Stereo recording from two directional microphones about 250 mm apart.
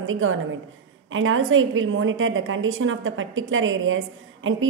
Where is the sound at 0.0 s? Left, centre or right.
Right.